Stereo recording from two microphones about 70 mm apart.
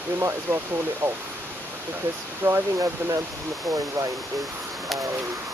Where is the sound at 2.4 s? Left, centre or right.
Right.